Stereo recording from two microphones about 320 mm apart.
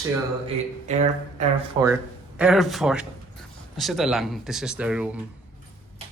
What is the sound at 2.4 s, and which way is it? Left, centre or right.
Speech, centre.